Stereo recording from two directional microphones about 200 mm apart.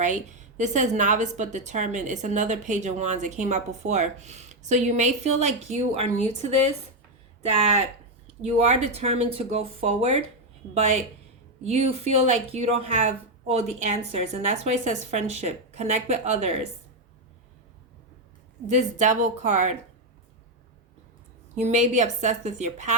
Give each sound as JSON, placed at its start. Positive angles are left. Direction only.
{"t": 0.0, "sound": "a woman's voice", "side_deg": -35}
{"t": 7.6, "sound": "a woman's voice", "side_deg": -35}
{"t": 18.7, "sound": "a woman's voice", "side_deg": -35}
{"t": 21.5, "sound": "a woman's voice", "side_deg": -35}